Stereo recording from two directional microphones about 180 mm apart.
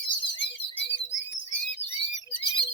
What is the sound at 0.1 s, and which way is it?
Bird, 85° left.